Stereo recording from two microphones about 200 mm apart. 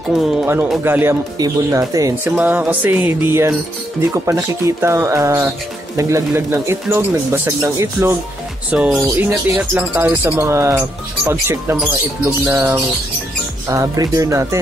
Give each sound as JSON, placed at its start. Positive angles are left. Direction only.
{"t": 0.2, "sound": "speech", "side_deg": -5}